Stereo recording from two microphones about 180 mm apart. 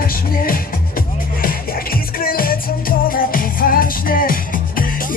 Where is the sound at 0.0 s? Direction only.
55° left (ahead or behind).